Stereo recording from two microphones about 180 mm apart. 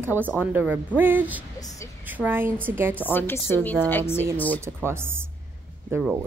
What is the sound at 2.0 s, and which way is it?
Speech, 10° right (ahead or behind).